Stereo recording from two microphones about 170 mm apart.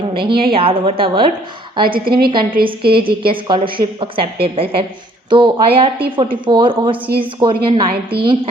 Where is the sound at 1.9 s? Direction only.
60° right (ahead or behind).